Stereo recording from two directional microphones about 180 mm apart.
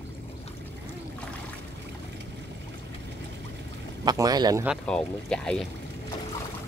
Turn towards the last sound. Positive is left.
turn(degrees=5)  # may be behind; listen again after turning